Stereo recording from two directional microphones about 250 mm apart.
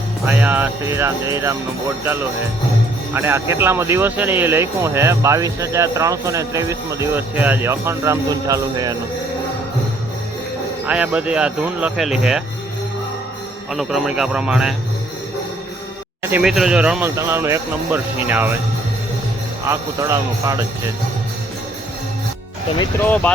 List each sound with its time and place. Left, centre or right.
0.3 s speech: centre
3.2 s speech: centre
10.8 s speech: centre
13.7 s speech: centre
16.3 s speech: centre
19.6 s speech: centre
23.0 s speech: centre